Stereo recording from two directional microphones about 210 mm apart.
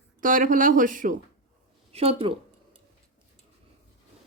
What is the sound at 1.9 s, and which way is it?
Speech, 30° right (ahead or behind).